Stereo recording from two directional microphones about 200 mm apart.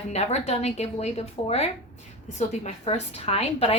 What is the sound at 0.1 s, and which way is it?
A woman's voice, 35° left (ahead or behind).